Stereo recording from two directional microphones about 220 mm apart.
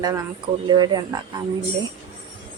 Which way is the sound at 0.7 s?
20° right (ahead or behind).